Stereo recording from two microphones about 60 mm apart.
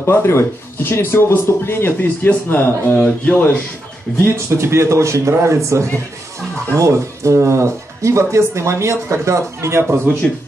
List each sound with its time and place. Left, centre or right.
0.0 s speech: left
4.5 s speech: right
10.2 s speech: centre